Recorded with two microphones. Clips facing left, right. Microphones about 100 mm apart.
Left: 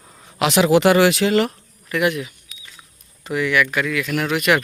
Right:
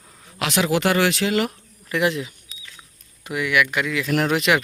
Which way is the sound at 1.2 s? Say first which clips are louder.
Left 4 dB; 5° right (ahead or behind).